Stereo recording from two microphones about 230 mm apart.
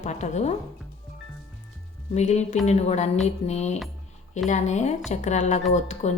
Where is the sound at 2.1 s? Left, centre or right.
Left.